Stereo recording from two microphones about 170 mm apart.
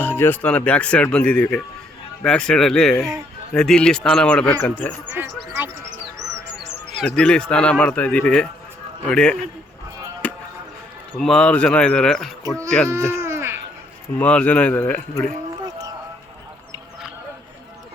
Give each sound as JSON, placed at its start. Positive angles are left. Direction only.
{"t": 0.0, "sound": "speech", "side_deg": 10}
{"t": 5.1, "sound": "speech", "side_deg": -10}
{"t": 7.0, "sound": "speech", "side_deg": 5}
{"t": 10.2, "sound": "music", "side_deg": 10}
{"t": 11.2, "sound": "speech", "side_deg": 5}
{"t": 13.1, "sound": "baby cry", "side_deg": -15}
{"t": 14.2, "sound": "speech", "side_deg": 10}
{"t": 15.6, "sound": "music", "side_deg": -20}